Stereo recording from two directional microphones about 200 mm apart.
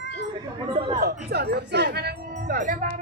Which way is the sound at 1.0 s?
50° right (ahead or behind).